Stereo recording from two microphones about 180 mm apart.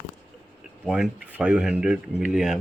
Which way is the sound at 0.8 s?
5° right (ahead or behind).